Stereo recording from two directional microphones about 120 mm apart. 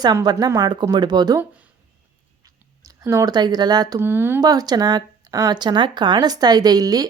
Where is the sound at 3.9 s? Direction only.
20° right (ahead or behind).